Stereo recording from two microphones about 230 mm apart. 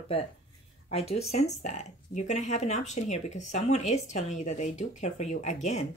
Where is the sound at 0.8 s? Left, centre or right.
Left.